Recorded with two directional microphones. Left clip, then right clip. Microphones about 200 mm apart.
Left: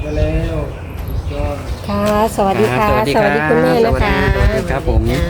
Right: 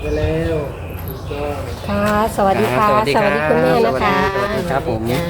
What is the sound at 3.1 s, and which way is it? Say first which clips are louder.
Speech: left 2 dB; 50° left (ahead or behind).